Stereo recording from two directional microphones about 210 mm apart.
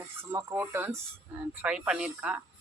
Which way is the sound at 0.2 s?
15° right (ahead or behind).